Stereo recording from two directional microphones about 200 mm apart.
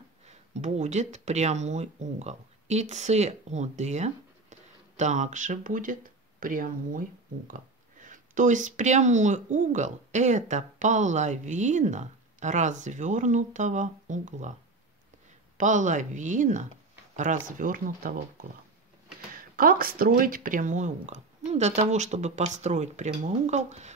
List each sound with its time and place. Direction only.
0.3 s speech: 35° right (ahead or behind)
15.5 s speech: 40° right (ahead or behind)